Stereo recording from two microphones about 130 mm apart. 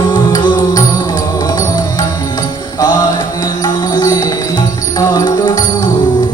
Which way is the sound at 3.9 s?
30° left (ahead or behind).